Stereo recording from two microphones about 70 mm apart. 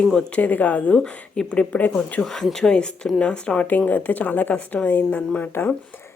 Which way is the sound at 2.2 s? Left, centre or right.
Centre.